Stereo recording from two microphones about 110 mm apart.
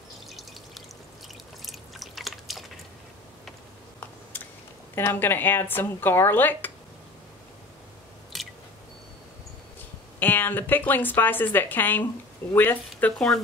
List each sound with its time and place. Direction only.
0.3 s a sound: centre (ahead or behind)
1.7 s drip: centre (ahead or behind)
4.9 s speech: 20° left (ahead or behind)
8.3 s a sound: centre (ahead or behind)
10.1 s a woman's voice: 15° left (ahead or behind)
13.0 s a woman's voice: 10° left (ahead or behind)